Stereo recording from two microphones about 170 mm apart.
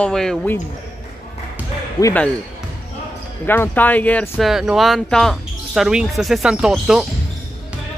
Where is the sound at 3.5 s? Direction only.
10° left (ahead or behind).